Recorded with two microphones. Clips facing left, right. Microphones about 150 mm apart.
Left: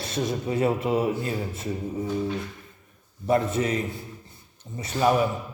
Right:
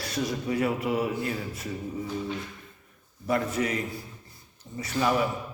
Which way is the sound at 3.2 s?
25° left (ahead or behind).